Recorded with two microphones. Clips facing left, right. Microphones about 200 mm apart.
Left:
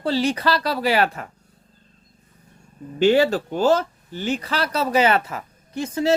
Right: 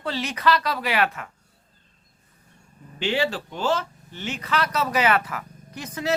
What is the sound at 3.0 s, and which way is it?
A woman's voice, 45° left (ahead or behind).